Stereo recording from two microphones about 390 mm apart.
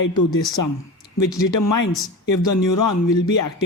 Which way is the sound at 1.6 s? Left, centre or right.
Left.